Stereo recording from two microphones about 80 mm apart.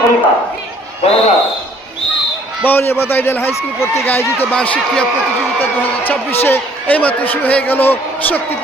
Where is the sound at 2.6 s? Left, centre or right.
Left.